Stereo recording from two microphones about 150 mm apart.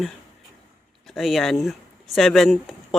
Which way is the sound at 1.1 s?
Centre (ahead or behind).